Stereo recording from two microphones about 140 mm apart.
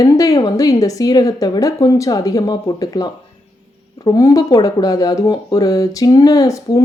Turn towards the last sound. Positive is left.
turn(degrees=25)  # may be behind; listen again after turning